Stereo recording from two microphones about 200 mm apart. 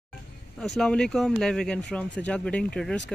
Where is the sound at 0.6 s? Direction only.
Centre (ahead or behind).